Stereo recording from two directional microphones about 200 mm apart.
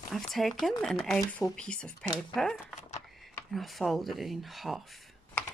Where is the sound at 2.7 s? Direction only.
35° left (ahead or behind).